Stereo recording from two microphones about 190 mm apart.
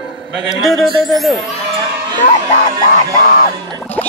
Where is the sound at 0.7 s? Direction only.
Centre (ahead or behind).